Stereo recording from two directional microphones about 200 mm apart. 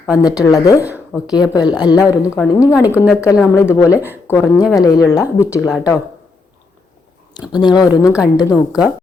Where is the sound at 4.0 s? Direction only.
10° right (ahead or behind).